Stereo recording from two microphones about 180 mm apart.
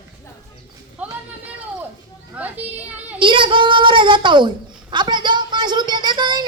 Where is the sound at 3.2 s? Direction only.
25° right (ahead or behind).